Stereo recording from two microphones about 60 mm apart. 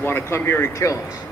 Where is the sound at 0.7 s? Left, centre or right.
Left.